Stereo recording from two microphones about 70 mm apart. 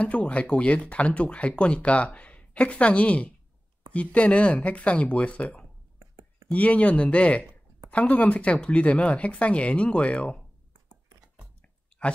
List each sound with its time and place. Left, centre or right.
0.0 s speech: centre
5.9 s whispering: right
6.5 s speech: left